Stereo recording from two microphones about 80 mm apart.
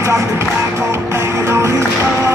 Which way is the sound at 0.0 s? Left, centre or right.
Right.